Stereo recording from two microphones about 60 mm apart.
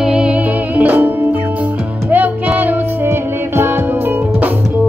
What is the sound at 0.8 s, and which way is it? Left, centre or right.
Music, right.